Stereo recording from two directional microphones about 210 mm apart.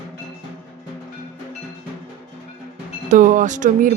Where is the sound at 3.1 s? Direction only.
35° right (ahead or behind).